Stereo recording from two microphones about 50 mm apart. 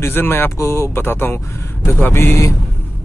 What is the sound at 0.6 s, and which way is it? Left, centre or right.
Speech, left.